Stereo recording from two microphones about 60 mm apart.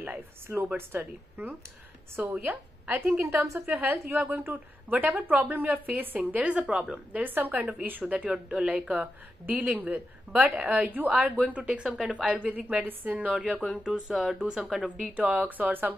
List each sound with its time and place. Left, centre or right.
0.0 s a woman's voice: right
6.1 s a woman's voice: centre
7.1 s speech: right
8.0 s a woman's voice: centre
12.4 s speech: right
13.3 s a woman's voice: centre
15.1 s speech: right